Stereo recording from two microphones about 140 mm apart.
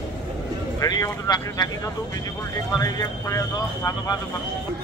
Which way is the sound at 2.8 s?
25° left (ahead or behind).